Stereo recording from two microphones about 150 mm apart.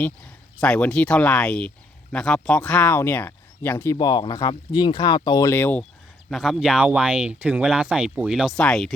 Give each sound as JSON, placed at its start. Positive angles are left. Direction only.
{"t": 0.6, "sound": "speech", "side_deg": 5}
{"t": 3.9, "sound": "speech", "side_deg": 30}
{"t": 5.5, "sound": "speech", "side_deg": 10}
{"t": 6.3, "sound": "speech", "side_deg": 0}